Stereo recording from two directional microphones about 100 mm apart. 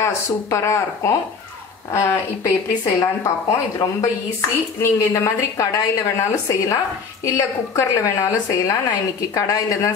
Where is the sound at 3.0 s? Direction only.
35° left (ahead or behind).